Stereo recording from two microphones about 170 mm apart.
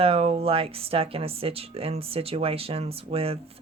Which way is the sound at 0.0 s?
35° right (ahead or behind).